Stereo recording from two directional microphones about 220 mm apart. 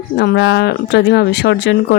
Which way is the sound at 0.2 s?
50° left (ahead or behind).